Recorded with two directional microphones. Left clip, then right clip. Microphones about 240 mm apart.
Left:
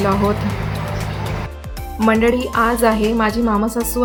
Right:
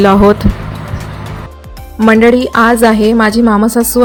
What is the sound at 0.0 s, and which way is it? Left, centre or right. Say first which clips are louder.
Speech: right 11 dB; right.